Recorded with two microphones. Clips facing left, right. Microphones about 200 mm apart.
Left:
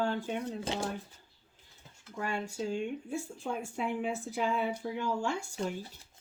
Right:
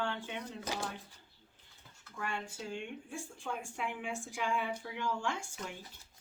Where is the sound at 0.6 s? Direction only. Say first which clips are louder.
Left 1 dB; 25° left (ahead or behind).